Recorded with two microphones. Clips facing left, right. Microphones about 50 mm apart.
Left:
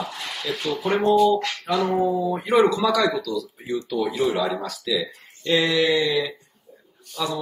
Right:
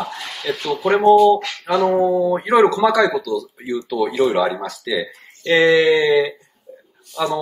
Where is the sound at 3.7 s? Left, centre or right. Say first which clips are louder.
Right 4 dB; right.